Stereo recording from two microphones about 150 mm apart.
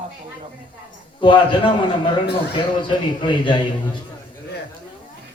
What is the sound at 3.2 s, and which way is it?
Speech, 35° left (ahead or behind).